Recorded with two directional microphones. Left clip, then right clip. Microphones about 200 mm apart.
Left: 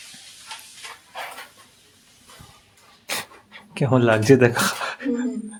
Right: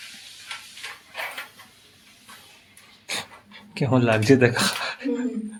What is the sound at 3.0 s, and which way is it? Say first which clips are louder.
Pant: left 2 dB; 10° left (ahead or behind).